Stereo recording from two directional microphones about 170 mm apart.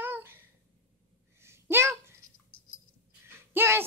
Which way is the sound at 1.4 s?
15° right (ahead or behind).